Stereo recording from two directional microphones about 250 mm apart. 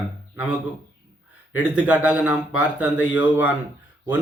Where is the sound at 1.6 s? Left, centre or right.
Centre.